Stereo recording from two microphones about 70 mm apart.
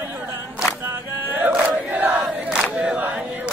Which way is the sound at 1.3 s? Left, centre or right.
Right.